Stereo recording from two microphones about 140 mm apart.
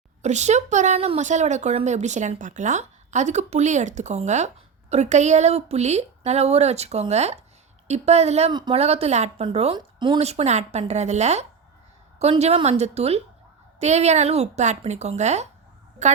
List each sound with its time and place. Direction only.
0.2 s a woman's voice: 55° right (ahead or behind); by 10.2 s 35° right (ahead or behind)
10.2 s a woman's voice: 50° right (ahead or behind)